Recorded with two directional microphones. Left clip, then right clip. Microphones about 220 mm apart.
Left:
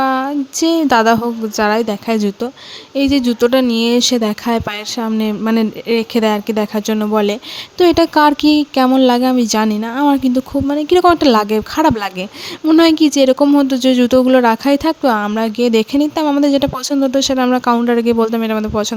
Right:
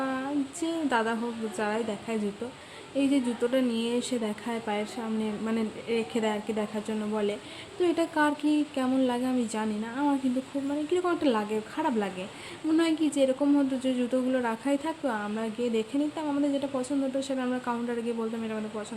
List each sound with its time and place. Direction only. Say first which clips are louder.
0.0 s speech: left 15 dB; 50° left (ahead or behind)